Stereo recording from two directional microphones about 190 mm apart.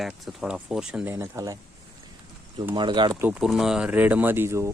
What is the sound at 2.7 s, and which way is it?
Speech, 25° right (ahead or behind).